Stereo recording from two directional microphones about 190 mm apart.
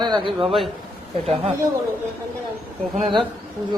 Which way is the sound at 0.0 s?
25° right (ahead or behind).